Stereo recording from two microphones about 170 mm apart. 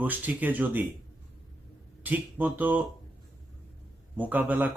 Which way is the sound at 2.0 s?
10° right (ahead or behind).